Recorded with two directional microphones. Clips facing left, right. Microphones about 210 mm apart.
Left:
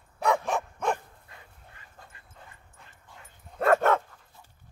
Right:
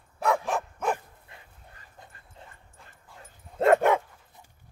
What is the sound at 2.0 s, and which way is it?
Dog, 20° right (ahead or behind).